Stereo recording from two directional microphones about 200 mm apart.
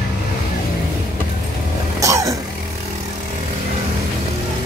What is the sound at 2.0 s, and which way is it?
Music, 15° right (ahead or behind).